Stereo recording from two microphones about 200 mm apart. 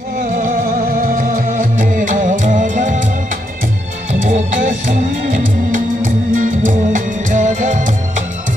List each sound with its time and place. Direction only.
0.2 s music: 45° right (ahead or behind)
4.1 s music: 40° right (ahead or behind)